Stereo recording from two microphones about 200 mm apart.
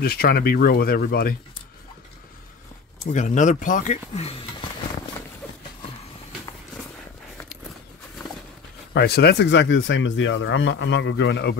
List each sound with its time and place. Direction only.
0.0 s speech: 50° left (ahead or behind)
3.1 s speech: 40° left (ahead or behind)
8.9 s speech: 55° left (ahead or behind)